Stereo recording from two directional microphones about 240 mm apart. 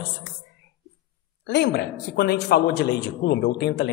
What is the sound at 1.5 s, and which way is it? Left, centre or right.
A woman's voice, left.